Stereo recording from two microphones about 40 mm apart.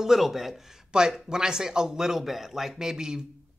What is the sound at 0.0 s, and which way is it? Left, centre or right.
Speech, centre.